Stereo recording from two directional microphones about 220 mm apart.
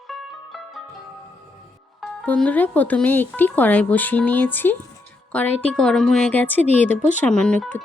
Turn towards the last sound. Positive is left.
turn(degrees=5)  # may be behind; listen again after turning